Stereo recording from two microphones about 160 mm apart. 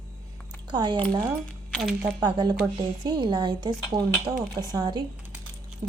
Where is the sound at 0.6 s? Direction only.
25° right (ahead or behind).